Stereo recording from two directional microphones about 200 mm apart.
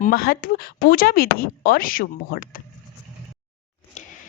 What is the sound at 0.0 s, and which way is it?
Speech, 45° left (ahead or behind).